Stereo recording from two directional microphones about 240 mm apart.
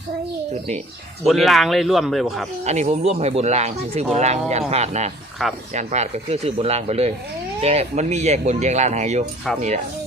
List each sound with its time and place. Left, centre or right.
1.2 s speech: centre
2.6 s speech: right
5.4 s speech: centre
5.7 s speech: right